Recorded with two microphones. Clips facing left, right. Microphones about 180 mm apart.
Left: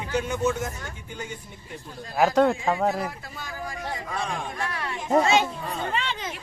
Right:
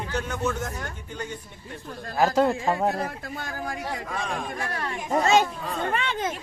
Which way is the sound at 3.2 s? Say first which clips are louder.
Right 3 dB; 50° right (ahead or behind).